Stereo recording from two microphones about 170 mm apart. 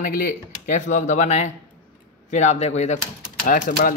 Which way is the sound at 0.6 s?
45° left (ahead or behind).